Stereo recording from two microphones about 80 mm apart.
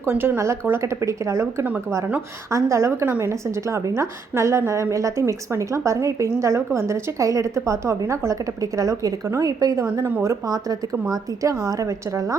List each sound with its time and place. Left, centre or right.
0.0 s a woman's voice: right